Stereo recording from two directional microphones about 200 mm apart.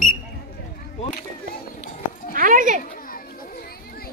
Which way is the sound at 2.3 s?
45° right (ahead or behind).